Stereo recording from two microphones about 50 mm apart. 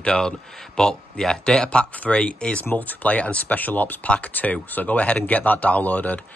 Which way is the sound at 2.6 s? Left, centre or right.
Left.